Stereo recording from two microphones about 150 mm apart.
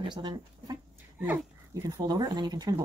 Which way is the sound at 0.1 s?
30° right (ahead or behind).